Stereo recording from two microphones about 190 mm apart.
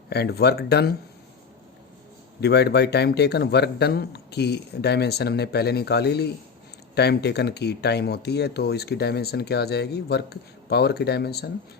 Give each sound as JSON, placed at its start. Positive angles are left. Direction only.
{"t": 0.1, "sound": "speech", "side_deg": 60}
{"t": 2.4, "sound": "speech", "side_deg": 60}